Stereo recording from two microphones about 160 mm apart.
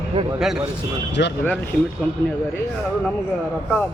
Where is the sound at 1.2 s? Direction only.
90° left.